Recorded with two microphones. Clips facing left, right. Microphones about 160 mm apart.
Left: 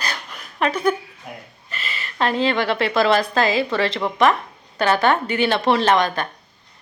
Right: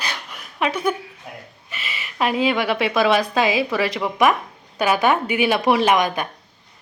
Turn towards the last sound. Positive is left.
turn(degrees=-10)  # may be behind; listen again after turning